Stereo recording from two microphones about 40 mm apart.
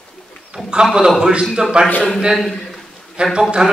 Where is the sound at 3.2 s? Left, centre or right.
Right.